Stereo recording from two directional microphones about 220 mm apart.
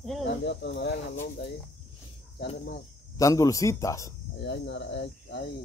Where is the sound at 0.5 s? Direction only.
50° left (ahead or behind).